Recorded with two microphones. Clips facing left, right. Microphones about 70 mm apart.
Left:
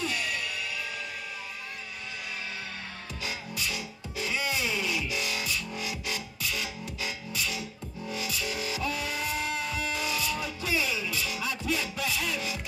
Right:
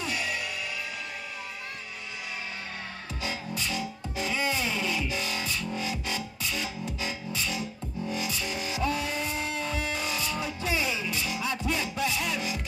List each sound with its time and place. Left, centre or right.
0.0 s music: centre
3.3 s music: right